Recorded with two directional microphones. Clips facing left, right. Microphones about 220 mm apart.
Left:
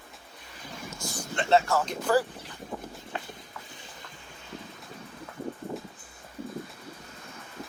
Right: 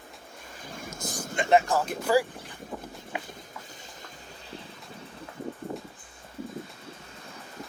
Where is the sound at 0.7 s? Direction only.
50° right (ahead or behind).